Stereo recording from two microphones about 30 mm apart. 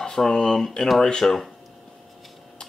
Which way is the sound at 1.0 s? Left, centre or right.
Left.